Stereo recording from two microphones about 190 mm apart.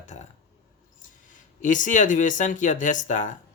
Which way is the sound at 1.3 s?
40° left (ahead or behind).